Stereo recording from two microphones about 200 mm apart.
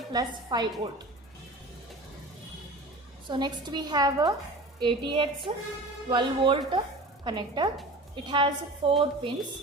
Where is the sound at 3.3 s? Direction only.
20° right (ahead or behind).